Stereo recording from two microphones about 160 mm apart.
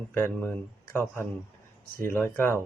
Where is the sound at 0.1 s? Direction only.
15° left (ahead or behind).